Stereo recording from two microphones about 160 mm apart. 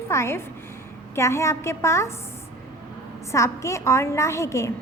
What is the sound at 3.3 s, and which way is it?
A woman's voice, 20° left (ahead or behind).